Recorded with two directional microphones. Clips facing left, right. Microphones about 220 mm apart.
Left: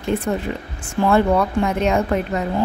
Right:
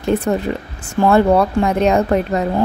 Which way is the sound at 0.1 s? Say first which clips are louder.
Right 4 dB; 40° right (ahead or behind).